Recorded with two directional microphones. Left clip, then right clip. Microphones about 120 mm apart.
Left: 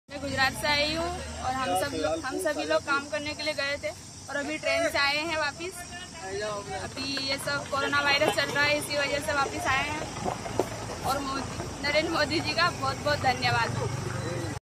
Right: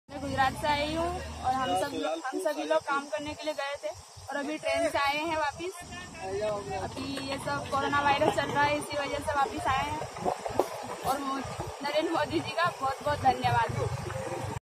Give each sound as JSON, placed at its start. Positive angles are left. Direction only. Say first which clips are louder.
{"t": 0.4, "sound": "speech", "louder": "left 2 dB", "side_deg": 25}
{"t": 7.1, "sound": "speech", "louder": "left 6 dB", "side_deg": 25}
{"t": 11.8, "sound": "speech", "louder": "left 3 dB", "side_deg": 20}